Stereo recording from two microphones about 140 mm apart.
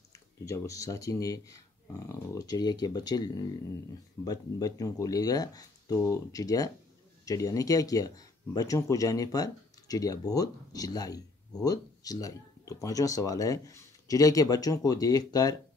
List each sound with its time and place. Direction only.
0.1 s speech: 25° left (ahead or behind)